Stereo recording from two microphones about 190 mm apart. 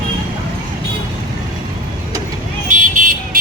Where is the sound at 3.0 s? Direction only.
45° right (ahead or behind).